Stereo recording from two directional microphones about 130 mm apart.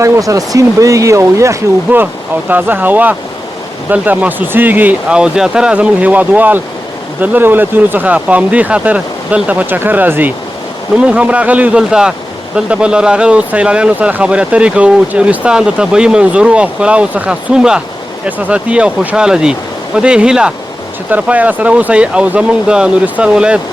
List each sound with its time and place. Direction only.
0.0 s speech: 25° right (ahead or behind); by 23.6 s 10° right (ahead or behind)